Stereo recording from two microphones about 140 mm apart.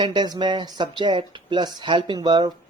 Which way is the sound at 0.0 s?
30° right (ahead or behind).